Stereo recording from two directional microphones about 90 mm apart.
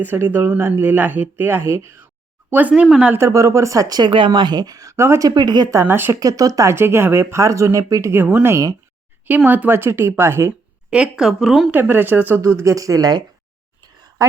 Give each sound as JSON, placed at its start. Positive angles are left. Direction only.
{"t": 0.0, "sound": "speech", "side_deg": -20}
{"t": 2.5, "sound": "speech", "side_deg": -20}
{"t": 3.2, "sound": "speech", "side_deg": -35}
{"t": 5.3, "sound": "speech", "side_deg": -50}
{"t": 5.8, "sound": "speech", "side_deg": -25}
{"t": 6.1, "sound": "speech", "side_deg": -45}
{"t": 6.7, "sound": "speech", "side_deg": -25}
{"t": 9.5, "sound": "speech", "side_deg": -20}
{"t": 10.9, "sound": "speech", "side_deg": -10}
{"t": 11.7, "sound": "a woman's voice", "side_deg": -25}